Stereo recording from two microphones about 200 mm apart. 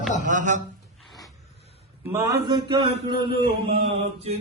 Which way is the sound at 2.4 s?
20° right (ahead or behind).